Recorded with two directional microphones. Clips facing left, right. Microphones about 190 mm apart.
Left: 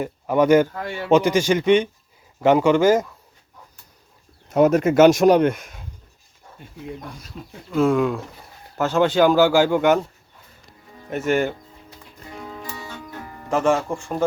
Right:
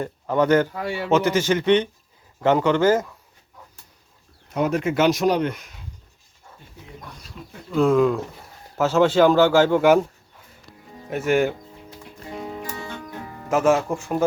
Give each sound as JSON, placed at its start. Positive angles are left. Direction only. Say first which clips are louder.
{"t": 0.0, "sound": "speech", "louder": "left 2 dB", "side_deg": 10}
{"t": 0.7, "sound": "speech", "louder": "right 2 dB", "side_deg": -10}
{"t": 1.1, "sound": "speech", "louder": "left 3 dB", "side_deg": 15}
{"t": 4.5, "sound": "speech", "louder": "left 6 dB", "side_deg": 45}
{"t": 7.7, "sound": "speech", "louder": "right 1 dB", "side_deg": 0}
{"t": 11.1, "sound": "speech", "louder": "right 1 dB", "side_deg": -10}
{"t": 12.4, "sound": "music", "louder": "right 2 dB", "side_deg": -15}
{"t": 13.3, "sound": "speech", "louder": "right 1 dB", "side_deg": -5}